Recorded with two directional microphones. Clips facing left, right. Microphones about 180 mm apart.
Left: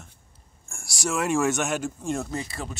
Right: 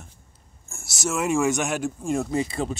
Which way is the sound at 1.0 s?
5° right (ahead or behind).